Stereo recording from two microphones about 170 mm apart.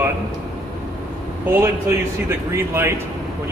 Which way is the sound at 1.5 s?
15° right (ahead or behind).